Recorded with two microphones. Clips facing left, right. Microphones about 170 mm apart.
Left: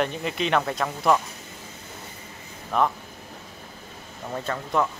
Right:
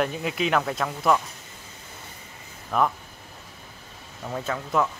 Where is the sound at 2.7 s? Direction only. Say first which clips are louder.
Even; centre (ahead or behind).